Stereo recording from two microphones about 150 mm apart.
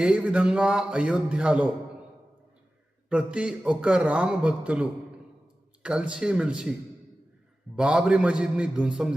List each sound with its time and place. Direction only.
0.0 s a man's voice: 5° right (ahead or behind)
3.1 s a man's voice: 5° right (ahead or behind)
7.8 s a man's voice: 5° right (ahead or behind)